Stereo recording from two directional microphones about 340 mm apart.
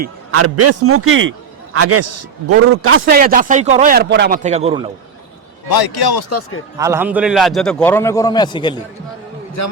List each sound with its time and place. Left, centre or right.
0.3 s a man's voice: right
3.1 s speech: right
5.6 s speech: left
6.7 s a man's voice: centre
9.6 s a man's voice: left